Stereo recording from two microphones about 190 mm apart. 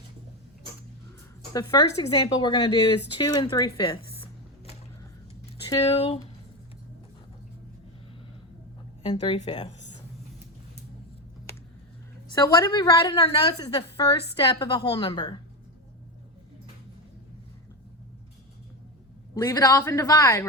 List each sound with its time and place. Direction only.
1.5 s a woman's voice: 20° left (ahead or behind)
3.2 s music: 20° left (ahead or behind)
5.6 s speech: 30° left (ahead or behind)
9.1 s a woman's voice: 30° left (ahead or behind)
12.3 s a woman's voice: 20° left (ahead or behind)
13.7 s a woman's voice: 30° left (ahead or behind)
19.3 s a man's voice: 20° left (ahead or behind)